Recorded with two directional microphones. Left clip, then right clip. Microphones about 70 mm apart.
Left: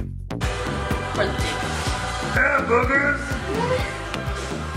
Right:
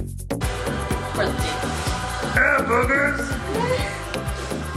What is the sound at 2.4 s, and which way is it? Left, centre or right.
Music, right.